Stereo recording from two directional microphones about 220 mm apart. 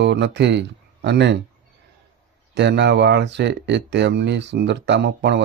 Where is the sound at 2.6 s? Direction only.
50° right (ahead or behind).